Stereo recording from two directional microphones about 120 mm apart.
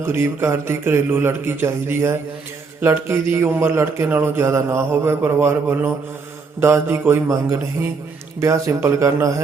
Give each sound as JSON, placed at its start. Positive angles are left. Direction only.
{"t": 0.0, "sound": "speech", "side_deg": -20}